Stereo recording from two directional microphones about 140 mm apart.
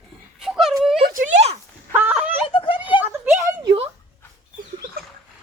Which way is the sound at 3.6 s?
40° right (ahead or behind).